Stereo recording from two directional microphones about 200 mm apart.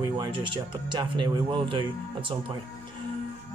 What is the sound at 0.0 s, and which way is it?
Music, 20° right (ahead or behind).